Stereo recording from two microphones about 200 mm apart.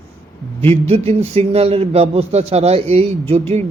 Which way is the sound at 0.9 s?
30° right (ahead or behind).